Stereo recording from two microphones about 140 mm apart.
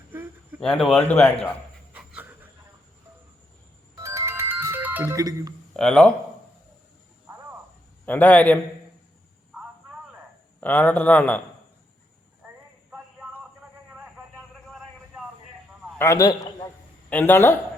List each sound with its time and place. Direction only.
0.8 s speech: 5° left (ahead or behind)
1.9 s pant: 10° right (ahead or behind)
3.9 s ringtone: 20° right (ahead or behind)
5.1 s speech: 25° right (ahead or behind)
5.7 s speech: 5° left (ahead or behind)
8.0 s speech: 10° left (ahead or behind)
10.6 s speech: 10° left (ahead or behind)
12.9 s a sound: 5° right (ahead or behind)
14.7 s a sound: centre (ahead or behind)
16.0 s a man's voice: 20° left (ahead or behind)
17.1 s speech: 15° left (ahead or behind)